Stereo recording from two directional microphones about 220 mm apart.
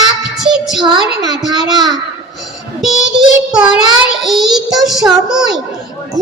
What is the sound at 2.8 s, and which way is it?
Child singing, centre (ahead or behind).